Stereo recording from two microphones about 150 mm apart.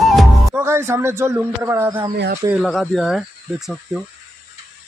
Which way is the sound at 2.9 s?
5° right (ahead or behind).